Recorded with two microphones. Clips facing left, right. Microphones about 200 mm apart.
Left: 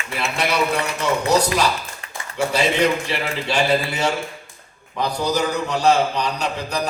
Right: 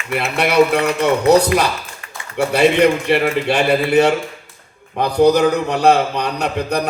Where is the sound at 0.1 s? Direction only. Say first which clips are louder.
Right 5 dB; 60° right (ahead or behind).